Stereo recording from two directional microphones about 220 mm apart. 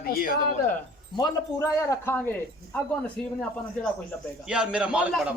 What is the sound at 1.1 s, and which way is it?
A man's voice, 15° left (ahead or behind).